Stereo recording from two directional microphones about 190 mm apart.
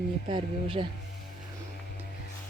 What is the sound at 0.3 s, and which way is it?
Speech, 25° right (ahead or behind).